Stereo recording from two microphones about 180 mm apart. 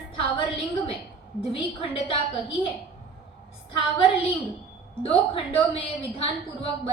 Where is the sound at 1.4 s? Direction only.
30° left (ahead or behind).